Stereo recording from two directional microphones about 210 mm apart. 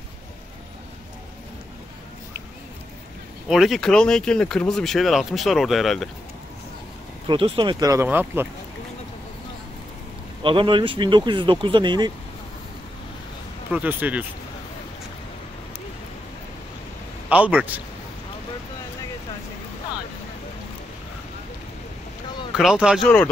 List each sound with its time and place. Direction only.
3.4 s speech: centre (ahead or behind)
7.2 s speech: 25° right (ahead or behind); by 8.5 s 10° right (ahead or behind)
10.4 s speech: 25° right (ahead or behind)
13.7 s speech: 5° right (ahead or behind)
17.3 s speech: 5° right (ahead or behind)
22.5 s speech: centre (ahead or behind)